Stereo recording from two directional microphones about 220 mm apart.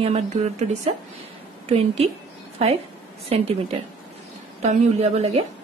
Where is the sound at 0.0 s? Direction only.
30° right (ahead or behind).